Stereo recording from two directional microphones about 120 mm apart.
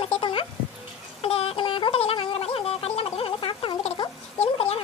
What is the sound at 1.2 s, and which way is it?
Gargling, 55° left (ahead or behind).